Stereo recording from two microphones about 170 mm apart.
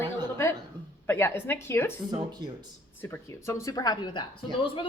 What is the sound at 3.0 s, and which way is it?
A woman's voice, 15° left (ahead or behind).